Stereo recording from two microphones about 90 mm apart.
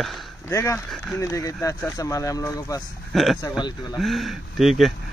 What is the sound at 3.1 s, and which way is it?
Speech, centre (ahead or behind).